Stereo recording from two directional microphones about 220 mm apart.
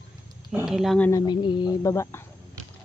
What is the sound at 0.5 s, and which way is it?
Speech, centre (ahead or behind).